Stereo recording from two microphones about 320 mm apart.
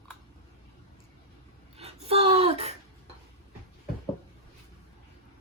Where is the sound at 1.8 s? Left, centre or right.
Centre.